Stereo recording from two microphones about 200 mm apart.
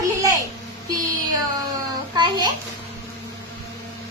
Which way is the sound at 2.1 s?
20° right (ahead or behind).